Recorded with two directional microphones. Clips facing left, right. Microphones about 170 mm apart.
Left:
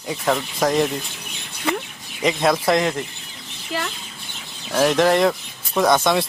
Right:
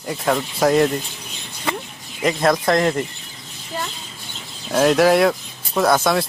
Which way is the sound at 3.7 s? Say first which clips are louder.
Left 1 dB; 85° left.